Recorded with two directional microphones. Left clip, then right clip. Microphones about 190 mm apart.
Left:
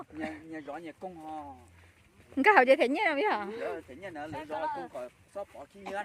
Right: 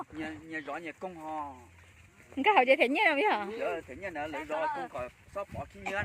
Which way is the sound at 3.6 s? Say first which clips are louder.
Right 3 dB; 40° right (ahead or behind).